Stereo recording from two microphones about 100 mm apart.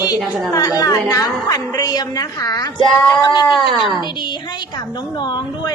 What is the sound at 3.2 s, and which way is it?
Speech, 45° left (ahead or behind).